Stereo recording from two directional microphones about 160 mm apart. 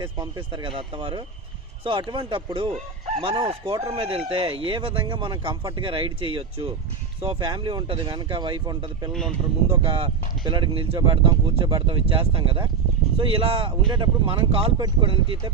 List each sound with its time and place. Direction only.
0.0 s speech: 30° right (ahead or behind)